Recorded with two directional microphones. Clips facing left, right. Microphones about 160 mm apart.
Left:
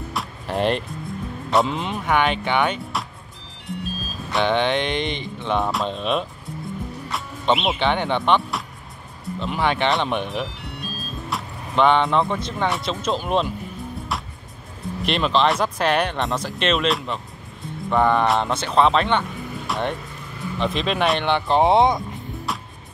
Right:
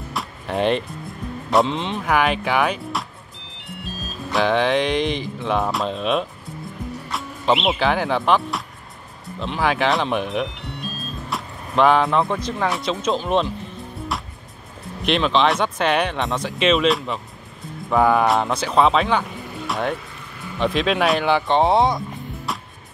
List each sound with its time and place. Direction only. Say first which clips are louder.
0.1 s music: right 2 dB; centre (ahead or behind)
1.5 s speech: right 2 dB; centre (ahead or behind)
4.3 s speech: right 2 dB; centre (ahead or behind)
15.0 s speech: right 1 dB; centre (ahead or behind)
21.6 s speech: left 1 dB; 20° left (ahead or behind)